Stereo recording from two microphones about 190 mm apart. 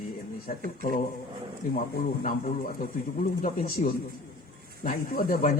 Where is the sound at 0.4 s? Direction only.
45° left (ahead or behind).